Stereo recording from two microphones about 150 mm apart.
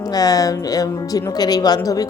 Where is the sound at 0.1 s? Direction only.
25° left (ahead or behind).